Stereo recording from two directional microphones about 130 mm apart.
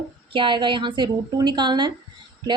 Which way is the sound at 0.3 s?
40° right (ahead or behind).